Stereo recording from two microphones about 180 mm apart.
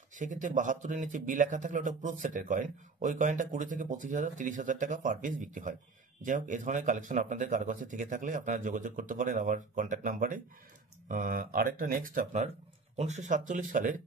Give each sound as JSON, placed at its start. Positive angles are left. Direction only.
{"t": 0.1, "sound": "speech", "side_deg": -45}